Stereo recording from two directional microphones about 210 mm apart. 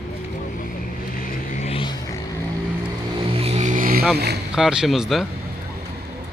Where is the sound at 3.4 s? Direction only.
30° right (ahead or behind).